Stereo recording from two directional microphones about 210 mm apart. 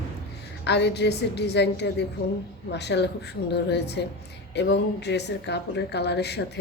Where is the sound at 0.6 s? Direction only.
55° left (ahead or behind).